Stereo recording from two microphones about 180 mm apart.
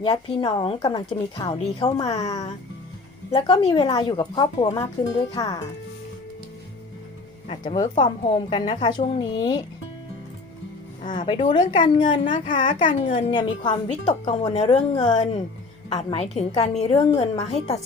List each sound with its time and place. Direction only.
0.0 s a woman's voice: 30° left (ahead or behind)
2.2 s a woman's voice: 20° left (ahead or behind)
3.3 s a woman's voice: 30° left (ahead or behind)
7.8 s a woman's voice: 25° left (ahead or behind)
11.1 s a woman's voice: 25° left (ahead or behind)
11.8 s a woman's voice: 25° left (ahead or behind)
13.9 s a woman's voice: 40° left (ahead or behind)
16.0 s a woman's voice: 25° left (ahead or behind)
16.2 s a woman's voice: 35° left (ahead or behind)